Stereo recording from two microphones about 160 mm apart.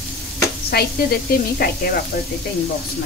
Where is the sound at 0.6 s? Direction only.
75° left (ahead or behind).